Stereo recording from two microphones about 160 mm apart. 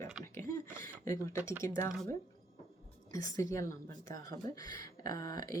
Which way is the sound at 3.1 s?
20° left (ahead or behind).